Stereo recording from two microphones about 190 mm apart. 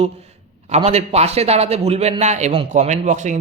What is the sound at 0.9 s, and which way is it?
A man's voice, 35° right (ahead or behind).